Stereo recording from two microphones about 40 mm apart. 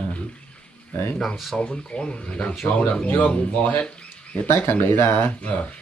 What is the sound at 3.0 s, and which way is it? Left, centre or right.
Speech, left.